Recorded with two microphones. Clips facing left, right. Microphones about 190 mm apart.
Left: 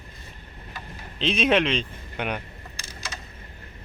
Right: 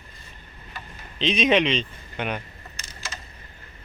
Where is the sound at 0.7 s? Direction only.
5° left (ahead or behind).